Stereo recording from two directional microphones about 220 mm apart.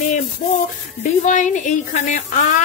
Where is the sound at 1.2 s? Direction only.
35° left (ahead or behind).